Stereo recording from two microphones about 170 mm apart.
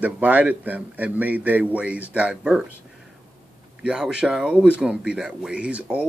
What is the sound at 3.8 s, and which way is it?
Speech, 5° right (ahead or behind).